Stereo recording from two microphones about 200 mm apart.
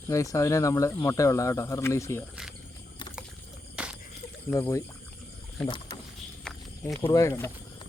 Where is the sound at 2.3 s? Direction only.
Centre (ahead or behind).